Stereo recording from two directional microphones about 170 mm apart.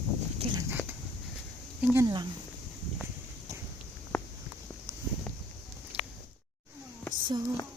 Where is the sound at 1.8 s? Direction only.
15° right (ahead or behind).